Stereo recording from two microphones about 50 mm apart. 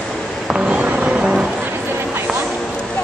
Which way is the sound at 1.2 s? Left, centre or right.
Centre.